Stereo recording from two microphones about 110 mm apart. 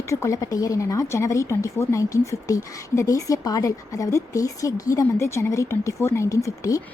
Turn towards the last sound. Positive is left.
turn(degrees=30)  # may be behind; listen again after turning